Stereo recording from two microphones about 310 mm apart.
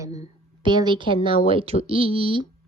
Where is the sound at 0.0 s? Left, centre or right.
Centre.